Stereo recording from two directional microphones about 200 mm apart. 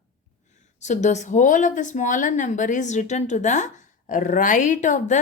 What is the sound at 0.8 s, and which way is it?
A woman's voice, 35° left (ahead or behind).